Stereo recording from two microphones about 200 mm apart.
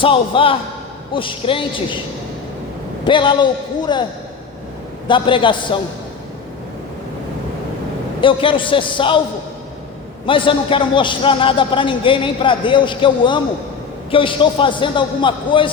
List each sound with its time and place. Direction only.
0.0 s a man's voice: 25° left (ahead or behind)
3.0 s a man's voice: 25° left (ahead or behind)
5.0 s a man's voice: 25° left (ahead or behind)
8.2 s a man's voice: 25° left (ahead or behind)
10.2 s a man's voice: 25° left (ahead or behind)